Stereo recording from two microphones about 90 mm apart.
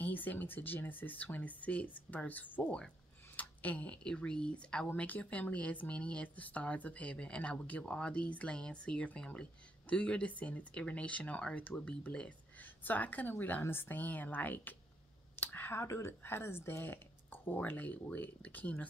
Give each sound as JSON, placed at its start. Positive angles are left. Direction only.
{"t": 0.0, "sound": "speech", "side_deg": 20}